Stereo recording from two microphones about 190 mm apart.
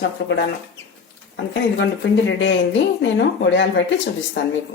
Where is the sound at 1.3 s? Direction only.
70° left (ahead or behind).